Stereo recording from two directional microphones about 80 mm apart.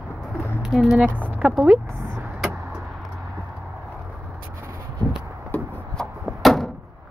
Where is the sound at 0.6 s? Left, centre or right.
Centre.